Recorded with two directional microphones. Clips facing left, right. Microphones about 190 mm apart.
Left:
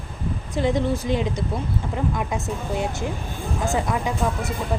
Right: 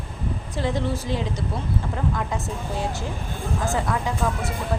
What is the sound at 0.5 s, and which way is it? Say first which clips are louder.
Speech: left 4 dB; 20° left (ahead or behind).